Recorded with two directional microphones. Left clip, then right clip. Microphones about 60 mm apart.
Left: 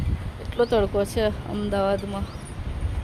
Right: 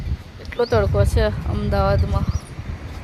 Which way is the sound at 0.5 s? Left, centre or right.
Left.